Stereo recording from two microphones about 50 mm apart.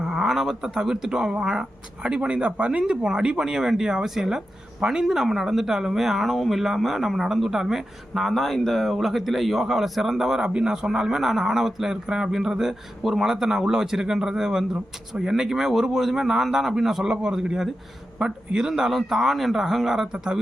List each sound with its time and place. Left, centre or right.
0.0 s a man's voice: centre
2.8 s speech: centre